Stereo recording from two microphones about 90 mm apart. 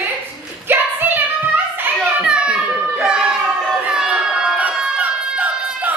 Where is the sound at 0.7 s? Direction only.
20° right (ahead or behind).